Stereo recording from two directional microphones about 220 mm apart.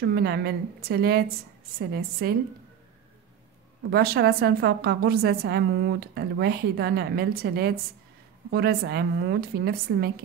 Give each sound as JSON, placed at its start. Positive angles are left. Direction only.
{"t": 0.0, "sound": "a woman's voice", "side_deg": -45}
{"t": 3.9, "sound": "a woman's voice", "side_deg": -45}